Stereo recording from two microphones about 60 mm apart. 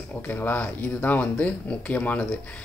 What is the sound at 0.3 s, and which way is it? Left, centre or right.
Speech, left.